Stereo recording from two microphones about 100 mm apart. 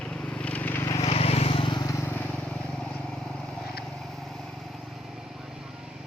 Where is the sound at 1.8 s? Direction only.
25° left (ahead or behind).